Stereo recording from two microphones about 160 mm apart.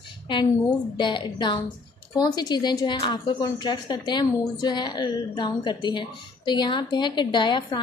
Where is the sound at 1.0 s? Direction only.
30° left (ahead or behind).